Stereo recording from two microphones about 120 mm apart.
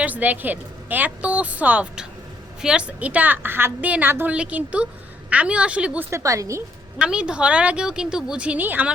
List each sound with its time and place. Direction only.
0.0 s a woman's voice: 15° right (ahead or behind)
6.1 s a woman's voice: 25° right (ahead or behind)
7.0 s a woman's voice: 10° right (ahead or behind)